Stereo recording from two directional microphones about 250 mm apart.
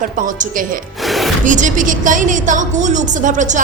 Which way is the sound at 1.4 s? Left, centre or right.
Right.